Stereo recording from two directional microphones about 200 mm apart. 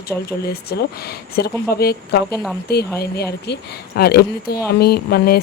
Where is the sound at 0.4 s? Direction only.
50° left (ahead or behind).